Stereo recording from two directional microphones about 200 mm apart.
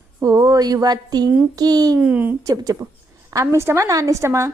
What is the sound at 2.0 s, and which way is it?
A woman's voice, 10° right (ahead or behind).